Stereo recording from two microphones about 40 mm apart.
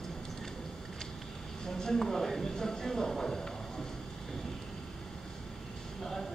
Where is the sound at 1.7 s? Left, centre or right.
Centre.